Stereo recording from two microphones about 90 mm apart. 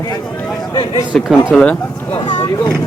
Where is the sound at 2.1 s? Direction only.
70° left (ahead or behind).